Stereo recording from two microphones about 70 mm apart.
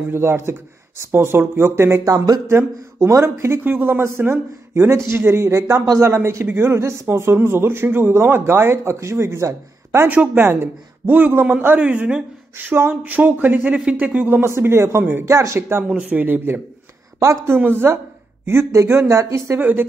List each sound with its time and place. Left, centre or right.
0.1 s speech: right
2.0 s speech: right
2.5 s speech: right
3.6 s speech: right
10.0 s speech: right
10.4 s speech: right; by 12.3 s centre
12.5 s speech: right
14.4 s speech: right
15.2 s speech: right
15.9 s speech: centre
17.6 s speech: right
19.6 s speech: right